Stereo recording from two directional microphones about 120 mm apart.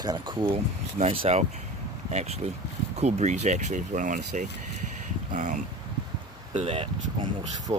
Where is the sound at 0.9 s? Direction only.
60° right (ahead or behind); by 5.6 s 90° right.